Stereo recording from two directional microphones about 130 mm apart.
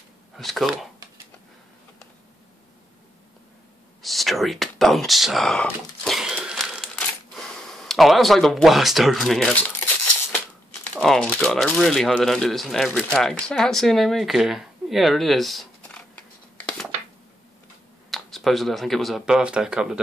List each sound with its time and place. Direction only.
0.4 s speech: centre (ahead or behind)
4.0 s a sound: centre (ahead or behind)
11.0 s speech: 5° left (ahead or behind)
18.1 s speech: centre (ahead or behind)